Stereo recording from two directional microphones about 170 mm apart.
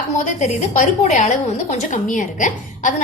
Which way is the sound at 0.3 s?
45° left (ahead or behind).